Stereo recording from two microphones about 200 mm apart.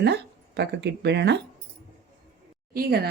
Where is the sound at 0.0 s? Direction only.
55° right (ahead or behind).